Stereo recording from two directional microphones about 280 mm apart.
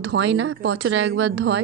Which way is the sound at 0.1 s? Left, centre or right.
Right.